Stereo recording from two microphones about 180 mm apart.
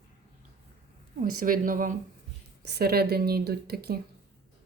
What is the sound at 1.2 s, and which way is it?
Speech, 50° right (ahead or behind).